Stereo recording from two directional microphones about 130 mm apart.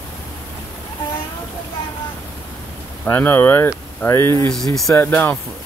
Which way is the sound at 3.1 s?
15° left (ahead or behind).